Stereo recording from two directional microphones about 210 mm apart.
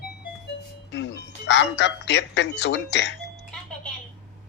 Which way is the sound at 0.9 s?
55° left (ahead or behind).